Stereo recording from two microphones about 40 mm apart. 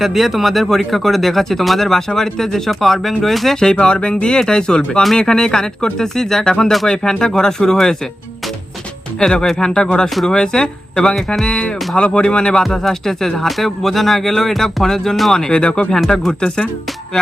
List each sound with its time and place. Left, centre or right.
0.0 s speech: centre
3.6 s speech: centre
9.5 s speech: centre
12.7 s speech: centre